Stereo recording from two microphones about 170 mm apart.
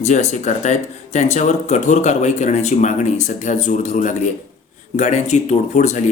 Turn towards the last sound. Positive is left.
turn(degrees=45)  # may be behind; listen again after turning